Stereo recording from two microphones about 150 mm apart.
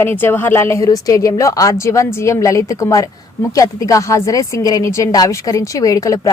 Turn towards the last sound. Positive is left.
turn(degrees=20)  # may be behind; listen again after turning